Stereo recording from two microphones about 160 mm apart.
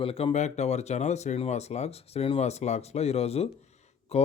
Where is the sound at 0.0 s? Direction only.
35° left (ahead or behind).